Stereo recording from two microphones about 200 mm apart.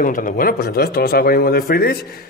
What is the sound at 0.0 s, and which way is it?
A man's voice, 45° left (ahead or behind).